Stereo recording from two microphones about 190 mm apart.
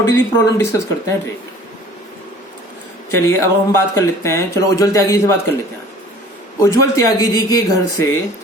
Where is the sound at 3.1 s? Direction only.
15° left (ahead or behind).